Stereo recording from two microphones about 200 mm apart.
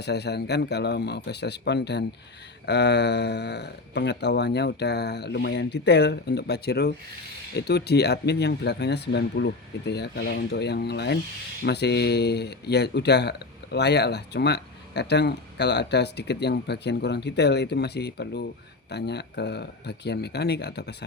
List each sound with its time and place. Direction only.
0.0 s speech: 55° left (ahead or behind)